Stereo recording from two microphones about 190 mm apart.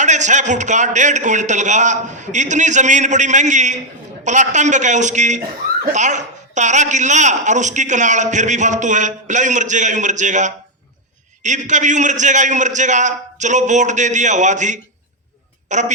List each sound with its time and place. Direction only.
0.0 s a woman's voice: 40° right (ahead or behind)